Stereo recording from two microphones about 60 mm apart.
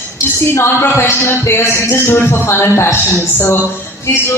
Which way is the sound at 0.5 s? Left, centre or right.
Left.